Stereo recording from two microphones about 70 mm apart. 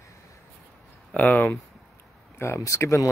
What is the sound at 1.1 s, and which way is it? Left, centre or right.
Speech, centre.